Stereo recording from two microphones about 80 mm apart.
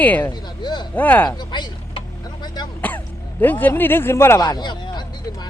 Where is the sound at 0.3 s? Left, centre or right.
Left.